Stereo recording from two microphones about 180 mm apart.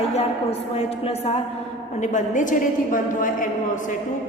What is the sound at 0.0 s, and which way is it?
A woman's voice, 35° left (ahead or behind).